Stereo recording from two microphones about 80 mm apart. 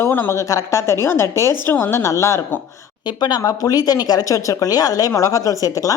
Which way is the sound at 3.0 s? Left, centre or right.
Left.